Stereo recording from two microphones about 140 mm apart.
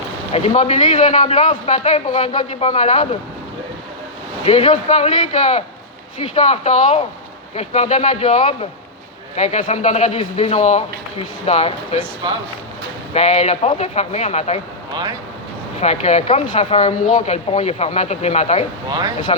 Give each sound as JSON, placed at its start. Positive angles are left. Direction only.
{"t": 0.3, "sound": "speech", "side_deg": 45}
{"t": 0.9, "sound": "a man's voice", "side_deg": 65}
{"t": 4.4, "sound": "speech", "side_deg": 40}
{"t": 4.9, "sound": "a man's voice", "side_deg": 55}
{"t": 13.1, "sound": "speech", "side_deg": 50}
{"t": 15.8, "sound": "speech", "side_deg": 50}
{"t": 18.9, "sound": "speech", "side_deg": -30}